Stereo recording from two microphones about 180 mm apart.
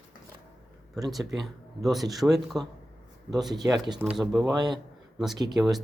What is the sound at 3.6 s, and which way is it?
Speech, 15° right (ahead or behind).